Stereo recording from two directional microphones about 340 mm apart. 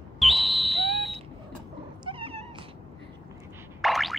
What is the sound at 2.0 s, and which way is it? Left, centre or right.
Cat, centre.